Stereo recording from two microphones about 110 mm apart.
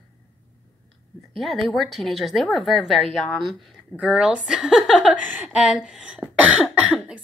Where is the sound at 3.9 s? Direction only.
10° right (ahead or behind).